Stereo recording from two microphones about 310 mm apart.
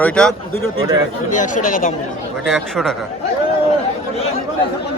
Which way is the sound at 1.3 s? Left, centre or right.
Left.